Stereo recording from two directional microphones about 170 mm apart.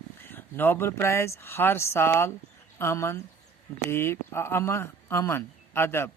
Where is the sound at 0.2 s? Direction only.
10° left (ahead or behind).